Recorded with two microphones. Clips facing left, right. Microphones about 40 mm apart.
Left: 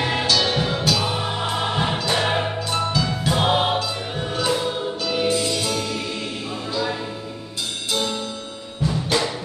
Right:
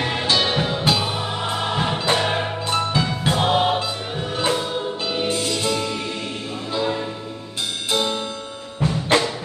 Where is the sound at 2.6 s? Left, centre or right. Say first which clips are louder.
Right 1 dB; right.